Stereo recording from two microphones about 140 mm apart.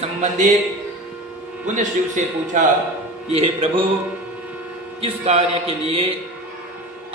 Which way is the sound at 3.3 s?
40° right (ahead or behind).